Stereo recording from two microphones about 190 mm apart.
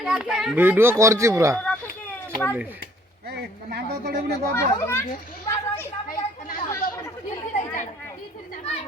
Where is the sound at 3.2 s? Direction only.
55° right (ahead or behind).